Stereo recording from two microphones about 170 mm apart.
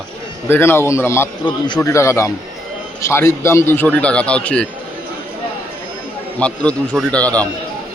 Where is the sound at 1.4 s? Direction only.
25° left (ahead or behind); by 4.7 s 5° left (ahead or behind).